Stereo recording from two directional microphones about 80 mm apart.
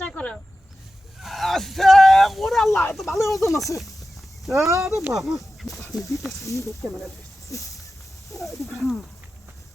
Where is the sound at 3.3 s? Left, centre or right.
Left.